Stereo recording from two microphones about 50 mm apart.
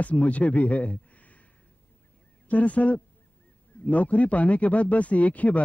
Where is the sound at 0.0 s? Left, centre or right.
Left.